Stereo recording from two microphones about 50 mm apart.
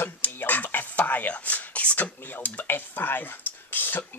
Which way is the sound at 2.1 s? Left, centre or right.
Left.